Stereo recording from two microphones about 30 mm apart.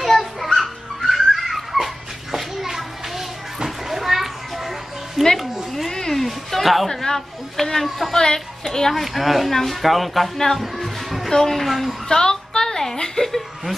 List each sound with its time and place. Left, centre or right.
0.0 s music: centre
2.3 s children playing: centre
5.4 s a sound: centre
5.9 s a sound: centre
6.2 s music: centre
6.9 s a woman's voice: centre
9.5 s a woman's voice: centre
9.8 s a woman's voice: centre
10.3 s a woman's voice: centre
10.6 s music: centre
11.2 s a woman's voice: centre
11.6 s a woman's voice: centre
12.1 s a sound: left